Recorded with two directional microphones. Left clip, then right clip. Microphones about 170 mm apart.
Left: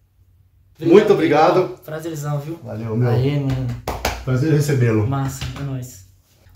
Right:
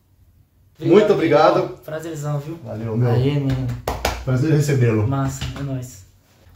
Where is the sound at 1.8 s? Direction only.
5° right (ahead or behind).